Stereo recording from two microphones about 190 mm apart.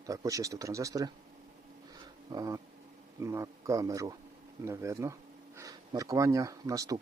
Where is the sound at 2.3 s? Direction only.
20° right (ahead or behind).